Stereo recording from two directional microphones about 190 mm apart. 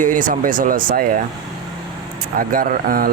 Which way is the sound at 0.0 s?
45° right (ahead or behind).